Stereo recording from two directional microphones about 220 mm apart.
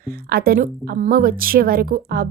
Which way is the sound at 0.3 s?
45° right (ahead or behind).